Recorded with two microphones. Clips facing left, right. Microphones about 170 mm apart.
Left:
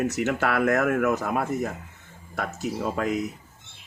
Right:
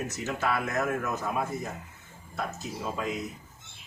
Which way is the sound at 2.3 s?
85° left.